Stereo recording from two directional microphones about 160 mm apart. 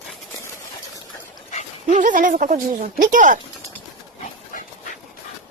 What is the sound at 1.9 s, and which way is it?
Speech, 55° right (ahead or behind).